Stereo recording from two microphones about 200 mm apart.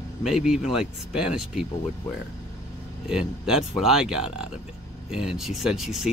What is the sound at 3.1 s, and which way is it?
Speech, 5° right (ahead or behind).